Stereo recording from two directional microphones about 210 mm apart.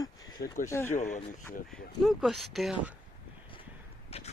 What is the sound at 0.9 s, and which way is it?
Speech, 35° left (ahead or behind).